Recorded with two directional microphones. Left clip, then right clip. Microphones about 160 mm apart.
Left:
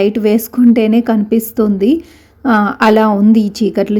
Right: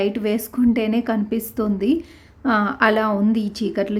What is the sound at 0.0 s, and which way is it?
A woman's voice, 30° left (ahead or behind).